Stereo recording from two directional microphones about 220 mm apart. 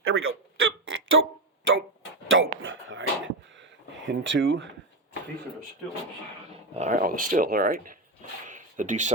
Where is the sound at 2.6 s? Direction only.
60° right (ahead or behind).